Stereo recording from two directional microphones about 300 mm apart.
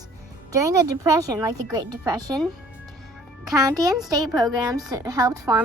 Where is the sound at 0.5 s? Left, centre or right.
Centre.